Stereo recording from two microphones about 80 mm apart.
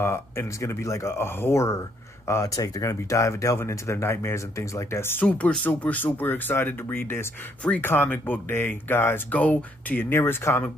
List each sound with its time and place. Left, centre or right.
0.0 s speech: left
2.4 s speech: left
5.2 s speech: centre; by 10.6 s left